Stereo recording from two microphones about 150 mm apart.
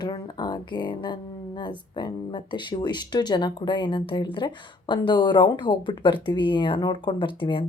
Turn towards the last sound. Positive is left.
turn(degrees=35)  # may be behind; listen again after turning